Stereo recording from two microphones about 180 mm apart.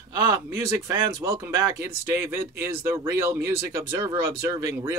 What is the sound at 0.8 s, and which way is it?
Speech, 15° right (ahead or behind).